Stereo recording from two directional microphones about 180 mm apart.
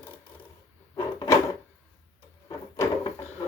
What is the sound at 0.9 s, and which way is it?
Drawer open or close, 20° left (ahead or behind).